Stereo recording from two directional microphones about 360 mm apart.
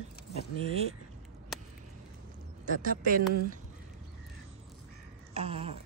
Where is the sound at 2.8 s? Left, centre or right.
Right.